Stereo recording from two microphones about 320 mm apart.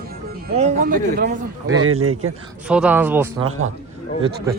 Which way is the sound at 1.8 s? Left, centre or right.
Right.